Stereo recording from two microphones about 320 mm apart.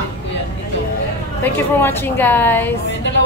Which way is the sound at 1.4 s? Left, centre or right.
Centre.